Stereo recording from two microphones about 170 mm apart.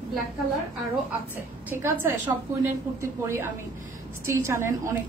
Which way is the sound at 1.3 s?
10° right (ahead or behind).